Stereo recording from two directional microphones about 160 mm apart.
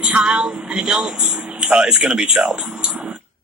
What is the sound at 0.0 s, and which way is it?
Speech, 5° right (ahead or behind).